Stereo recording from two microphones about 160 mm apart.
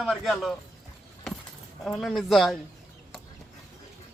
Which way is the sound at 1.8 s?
Centre (ahead or behind).